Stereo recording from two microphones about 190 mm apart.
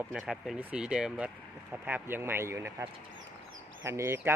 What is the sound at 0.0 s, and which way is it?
Speech, 5° right (ahead or behind).